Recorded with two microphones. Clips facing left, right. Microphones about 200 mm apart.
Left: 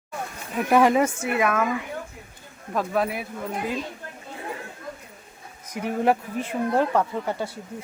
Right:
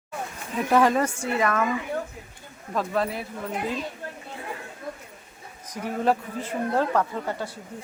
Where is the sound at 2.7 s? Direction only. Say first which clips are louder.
Left 1 dB; 5° left (ahead or behind).